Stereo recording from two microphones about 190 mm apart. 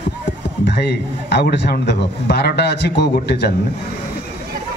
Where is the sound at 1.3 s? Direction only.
60° left (ahead or behind).